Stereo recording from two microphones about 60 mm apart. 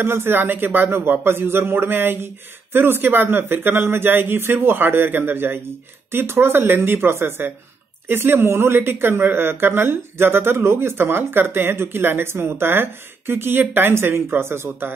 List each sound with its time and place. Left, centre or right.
0.0 s speech: right